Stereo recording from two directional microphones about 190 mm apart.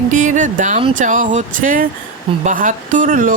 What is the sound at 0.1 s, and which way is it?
Speech, 40° right (ahead or behind).